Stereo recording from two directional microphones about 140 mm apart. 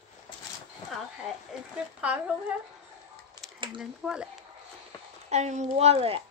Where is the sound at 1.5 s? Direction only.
5° right (ahead or behind).